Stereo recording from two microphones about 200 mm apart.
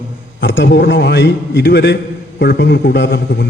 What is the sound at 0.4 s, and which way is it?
A man's voice, 65° left (ahead or behind).